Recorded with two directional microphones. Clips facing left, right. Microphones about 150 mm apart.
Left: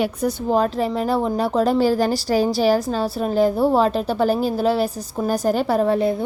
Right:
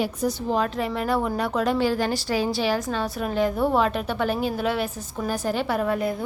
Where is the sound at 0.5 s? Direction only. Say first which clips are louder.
Left 5 dB; 35° left (ahead or behind).